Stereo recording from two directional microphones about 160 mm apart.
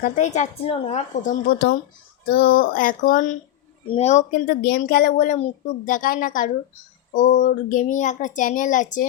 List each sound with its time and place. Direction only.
0.0 s speech: 50° left (ahead or behind)
2.2 s speech: 75° left (ahead or behind); by 3.3 s 55° left (ahead or behind)
3.8 s speech: 40° left (ahead or behind)